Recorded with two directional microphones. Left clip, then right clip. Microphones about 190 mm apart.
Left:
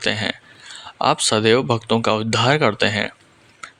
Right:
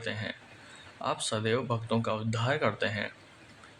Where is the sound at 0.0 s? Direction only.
45° left (ahead or behind).